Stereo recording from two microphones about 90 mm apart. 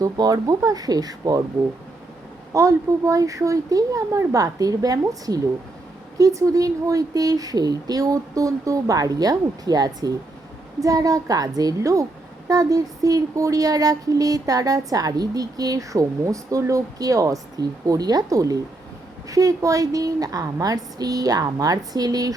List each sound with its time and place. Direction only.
0.0 s a woman's voice: 40° right (ahead or behind)
2.5 s a woman's voice: 35° right (ahead or behind)